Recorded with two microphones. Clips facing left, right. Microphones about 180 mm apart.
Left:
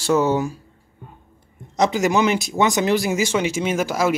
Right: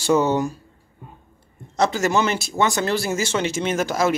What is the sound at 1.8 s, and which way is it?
Speech, 15° left (ahead or behind).